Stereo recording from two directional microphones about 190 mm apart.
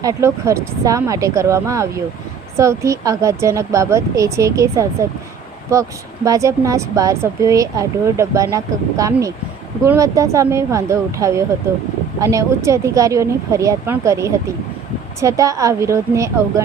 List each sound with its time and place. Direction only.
0.0 s speech: 15° right (ahead or behind)
6.2 s speech: 15° right (ahead or behind)